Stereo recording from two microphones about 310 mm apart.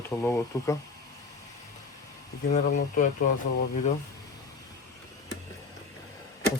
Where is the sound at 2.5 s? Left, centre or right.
Left.